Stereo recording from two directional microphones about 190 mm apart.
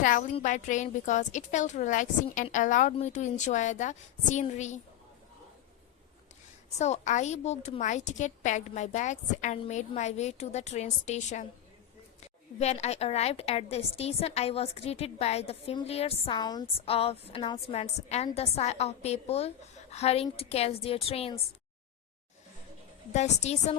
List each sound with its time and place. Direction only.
0.0 s a woman's voice: 45° left (ahead or behind)
6.7 s a woman's voice: 35° left (ahead or behind)
12.5 s a woman's voice: 35° left (ahead or behind)
23.1 s a woman's voice: 35° left (ahead or behind)